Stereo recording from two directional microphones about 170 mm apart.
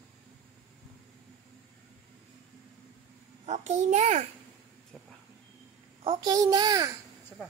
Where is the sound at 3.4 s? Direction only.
45° right (ahead or behind).